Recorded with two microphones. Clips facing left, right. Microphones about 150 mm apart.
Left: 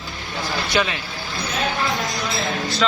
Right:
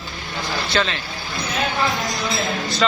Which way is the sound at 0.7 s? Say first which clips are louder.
Even; 15° left (ahead or behind).